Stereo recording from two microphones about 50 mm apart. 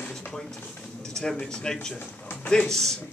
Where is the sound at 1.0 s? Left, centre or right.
Centre.